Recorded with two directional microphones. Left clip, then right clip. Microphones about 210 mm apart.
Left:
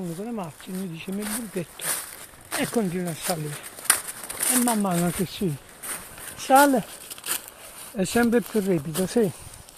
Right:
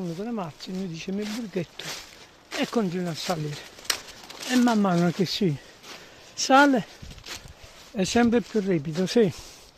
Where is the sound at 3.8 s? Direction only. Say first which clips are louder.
Left 4 dB; 45° left (ahead or behind).